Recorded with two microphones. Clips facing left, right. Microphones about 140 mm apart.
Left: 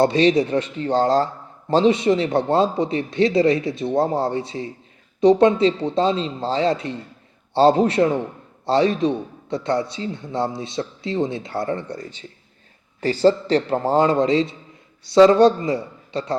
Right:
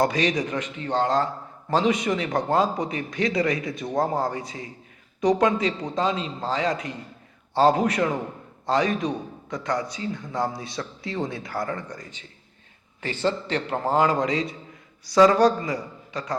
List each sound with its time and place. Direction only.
0.0 s a man's voice: 30° left (ahead or behind)